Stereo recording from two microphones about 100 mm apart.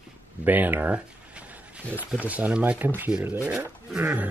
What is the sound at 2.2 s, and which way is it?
Speech, 15° right (ahead or behind).